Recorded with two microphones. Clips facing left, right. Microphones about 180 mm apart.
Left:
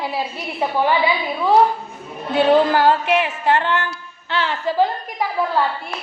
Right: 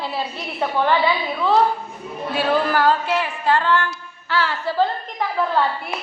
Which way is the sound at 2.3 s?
25° left (ahead or behind).